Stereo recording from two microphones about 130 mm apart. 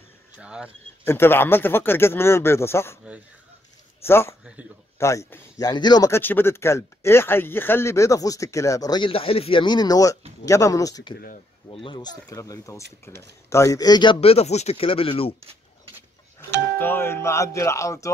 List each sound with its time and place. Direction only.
0.4 s speech: 5° right (ahead or behind)
1.0 s speech: 20° left (ahead or behind)
4.0 s speech: 20° left (ahead or behind)
11.7 s speech: 40° left (ahead or behind)
14.2 s speech: 50° left (ahead or behind)
16.3 s speech: 15° left (ahead or behind)